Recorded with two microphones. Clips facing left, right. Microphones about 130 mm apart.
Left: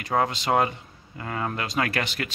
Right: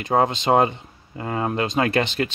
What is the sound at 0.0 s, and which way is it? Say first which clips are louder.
Speech: right 5 dB; 25° right (ahead or behind).